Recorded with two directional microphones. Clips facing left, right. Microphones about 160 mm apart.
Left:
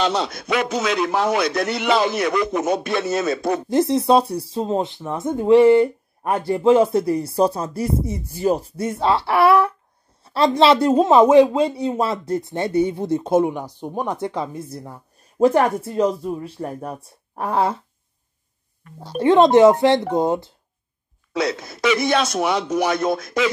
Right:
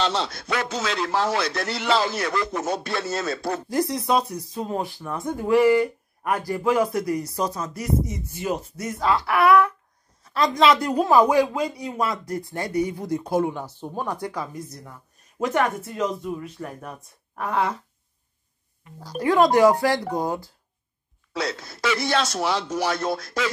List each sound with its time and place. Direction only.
0.0 s a man's voice: 15° left (ahead or behind)
18.9 s a man's voice: 25° left (ahead or behind)